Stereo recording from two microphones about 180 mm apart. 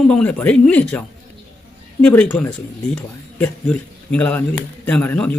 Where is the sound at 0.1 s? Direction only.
5° left (ahead or behind).